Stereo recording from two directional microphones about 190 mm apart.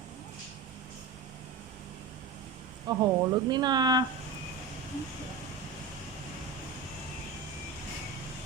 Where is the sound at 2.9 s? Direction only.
25° right (ahead or behind).